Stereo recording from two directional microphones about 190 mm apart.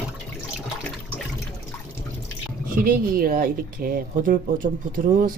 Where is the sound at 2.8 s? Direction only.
50° right (ahead or behind).